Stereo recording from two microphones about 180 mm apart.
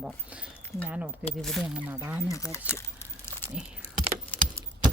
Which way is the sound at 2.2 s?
15° left (ahead or behind).